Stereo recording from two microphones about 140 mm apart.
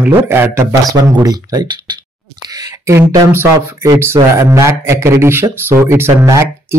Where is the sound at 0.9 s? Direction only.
30° right (ahead or behind).